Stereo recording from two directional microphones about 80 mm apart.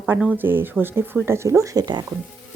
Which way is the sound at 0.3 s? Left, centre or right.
Right.